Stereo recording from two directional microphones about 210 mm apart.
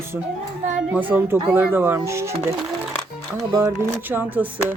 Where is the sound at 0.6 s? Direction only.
35° right (ahead or behind).